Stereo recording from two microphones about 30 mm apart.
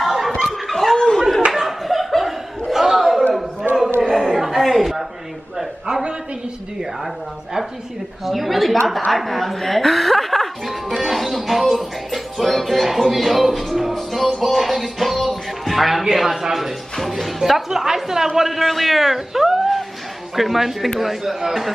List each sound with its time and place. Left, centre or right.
0.0 s chuckle: centre
0.7 s chuckle: centre
0.9 s a sound: left
1.9 s a sound: centre
2.7 s chatter: centre
3.3 s a sound: centre
8.3 s a man's voice: centre
9.1 s music: centre
13.0 s speech: centre
13.9 s music: centre
17.6 s a woman's voice: centre
18.6 s a man's voice: centre
19.1 s cat: centre
20.3 s a woman's voice: centre